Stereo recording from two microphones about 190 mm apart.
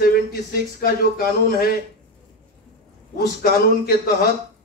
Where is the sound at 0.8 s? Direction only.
50° left (ahead or behind).